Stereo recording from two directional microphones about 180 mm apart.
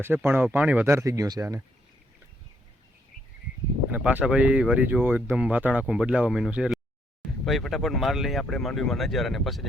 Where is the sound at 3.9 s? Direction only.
10° right (ahead or behind).